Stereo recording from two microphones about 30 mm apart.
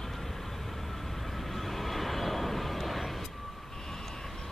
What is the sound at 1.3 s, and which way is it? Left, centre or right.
Vehicle, centre.